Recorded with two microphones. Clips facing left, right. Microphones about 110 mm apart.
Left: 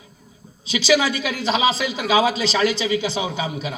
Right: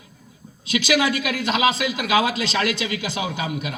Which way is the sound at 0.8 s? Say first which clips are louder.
Left 2 dB; 25° left (ahead or behind).